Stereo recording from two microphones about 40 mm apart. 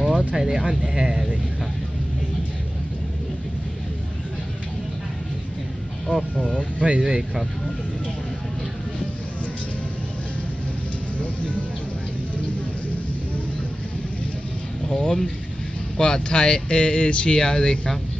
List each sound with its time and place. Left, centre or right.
0.4 s speech: centre
6.0 s speech: centre
6.8 s speech: right
14.9 s speech: centre